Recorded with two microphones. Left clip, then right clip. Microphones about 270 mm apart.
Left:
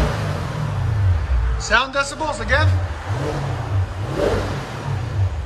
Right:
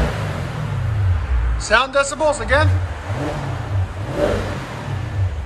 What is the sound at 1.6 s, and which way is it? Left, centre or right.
Speech, centre.